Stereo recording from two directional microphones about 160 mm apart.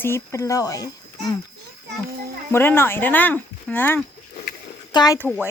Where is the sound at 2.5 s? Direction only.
15° left (ahead or behind).